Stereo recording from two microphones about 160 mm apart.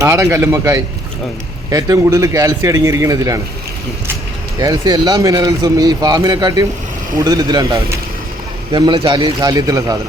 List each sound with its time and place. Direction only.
0.0 s speech: 20° right (ahead or behind)
4.6 s speech: 20° right (ahead or behind)
8.7 s speech: 30° right (ahead or behind)